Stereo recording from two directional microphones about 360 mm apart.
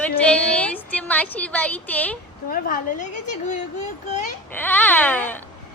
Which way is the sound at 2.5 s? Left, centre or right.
Left.